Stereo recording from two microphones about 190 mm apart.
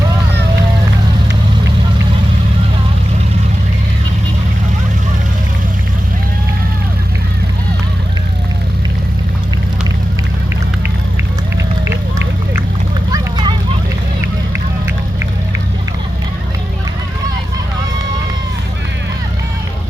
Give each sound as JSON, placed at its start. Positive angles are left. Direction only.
{"t": 11.9, "sound": "run", "side_deg": -15}
{"t": 13.1, "sound": "vehicle", "side_deg": -25}